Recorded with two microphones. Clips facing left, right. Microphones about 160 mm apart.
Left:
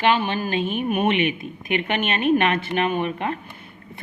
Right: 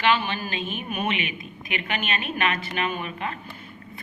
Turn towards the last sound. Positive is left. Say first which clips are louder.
# left 6 dB
turn(degrees=55)  # may be behind; listen again after turning